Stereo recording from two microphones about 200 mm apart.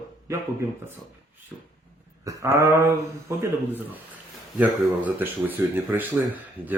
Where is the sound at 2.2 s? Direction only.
15° right (ahead or behind).